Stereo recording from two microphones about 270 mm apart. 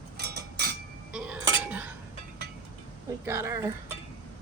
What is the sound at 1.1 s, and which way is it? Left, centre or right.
Dishes, centre.